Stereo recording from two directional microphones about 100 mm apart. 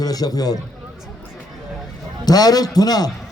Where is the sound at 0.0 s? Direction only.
40° left (ahead or behind).